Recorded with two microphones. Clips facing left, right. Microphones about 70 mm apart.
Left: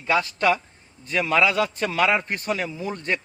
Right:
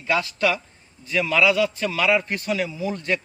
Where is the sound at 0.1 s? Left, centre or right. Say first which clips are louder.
Left 1 dB; left.